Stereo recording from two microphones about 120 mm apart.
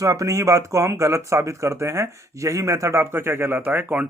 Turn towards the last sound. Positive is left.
turn(degrees=-15)  # may be behind; listen again after turning